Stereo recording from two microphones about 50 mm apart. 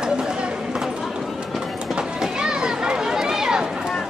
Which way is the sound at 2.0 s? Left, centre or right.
Centre.